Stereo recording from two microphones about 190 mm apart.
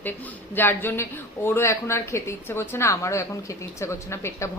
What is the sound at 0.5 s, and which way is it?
A woman's voice, 10° left (ahead or behind).